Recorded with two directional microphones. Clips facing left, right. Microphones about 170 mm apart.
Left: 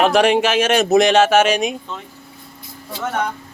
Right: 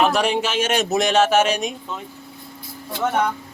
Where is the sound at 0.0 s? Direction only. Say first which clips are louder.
Left 5 dB; 75° left (ahead or behind).